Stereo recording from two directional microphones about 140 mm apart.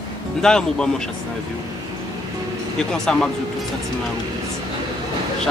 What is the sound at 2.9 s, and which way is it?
Speech, 5° left (ahead or behind).